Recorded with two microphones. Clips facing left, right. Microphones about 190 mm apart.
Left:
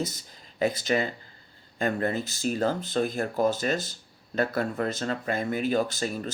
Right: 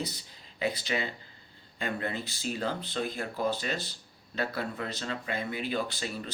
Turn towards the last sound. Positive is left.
turn(degrees=45)  # may be behind; listen again after turning